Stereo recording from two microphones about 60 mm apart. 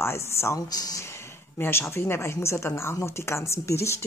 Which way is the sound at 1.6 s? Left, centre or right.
Left.